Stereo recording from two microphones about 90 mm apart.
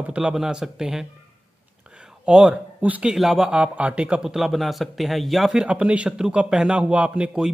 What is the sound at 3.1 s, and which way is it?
A man's voice, 5° right (ahead or behind).